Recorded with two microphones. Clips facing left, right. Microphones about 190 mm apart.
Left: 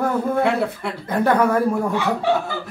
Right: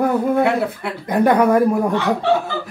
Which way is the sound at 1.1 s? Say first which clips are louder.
Right 4 dB; 15° right (ahead or behind).